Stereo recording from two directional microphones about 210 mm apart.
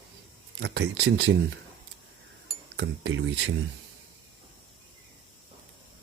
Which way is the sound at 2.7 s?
60° right (ahead or behind).